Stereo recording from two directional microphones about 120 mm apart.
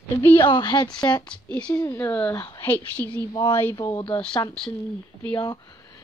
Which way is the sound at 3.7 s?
35° left (ahead or behind).